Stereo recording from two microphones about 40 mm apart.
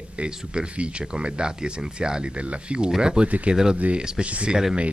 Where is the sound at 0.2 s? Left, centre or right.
Right.